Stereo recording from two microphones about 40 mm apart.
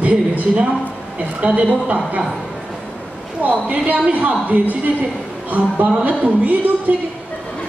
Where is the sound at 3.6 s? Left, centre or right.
Right.